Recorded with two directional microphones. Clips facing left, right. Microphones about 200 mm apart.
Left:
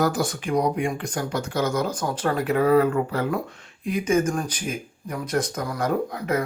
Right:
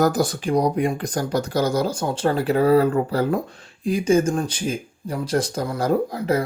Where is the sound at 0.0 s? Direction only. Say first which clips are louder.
Right 4 dB; 40° right (ahead or behind).